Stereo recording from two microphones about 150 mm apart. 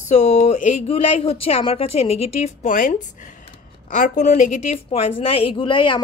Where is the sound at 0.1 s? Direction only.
50° left (ahead or behind).